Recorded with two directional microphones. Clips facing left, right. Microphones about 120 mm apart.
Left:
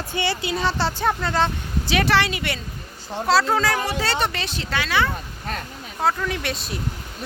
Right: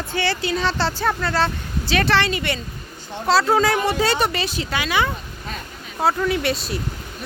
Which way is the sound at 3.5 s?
25° right (ahead or behind).